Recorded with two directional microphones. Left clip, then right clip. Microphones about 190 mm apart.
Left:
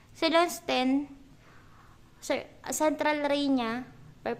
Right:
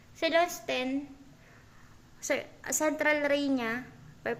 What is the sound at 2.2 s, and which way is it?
A woman's voice, 15° left (ahead or behind).